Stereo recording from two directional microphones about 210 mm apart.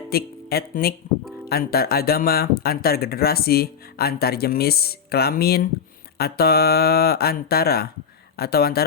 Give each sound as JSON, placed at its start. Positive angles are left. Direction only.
{"t": 0.1, "sound": "speech", "side_deg": 45}